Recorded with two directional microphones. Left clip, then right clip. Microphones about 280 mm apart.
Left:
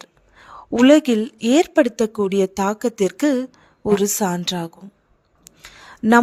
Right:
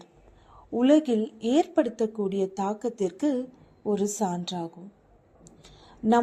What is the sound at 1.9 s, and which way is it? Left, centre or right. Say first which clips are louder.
Speech: left 7 dB; left.